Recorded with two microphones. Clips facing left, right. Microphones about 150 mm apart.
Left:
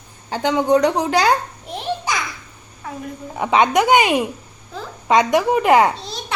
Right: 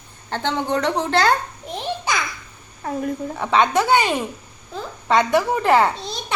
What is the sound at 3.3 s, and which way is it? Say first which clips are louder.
Speech: left 3 dB; 15° left (ahead or behind).